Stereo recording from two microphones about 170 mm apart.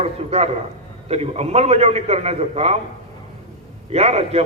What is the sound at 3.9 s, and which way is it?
Speech, 40° right (ahead or behind).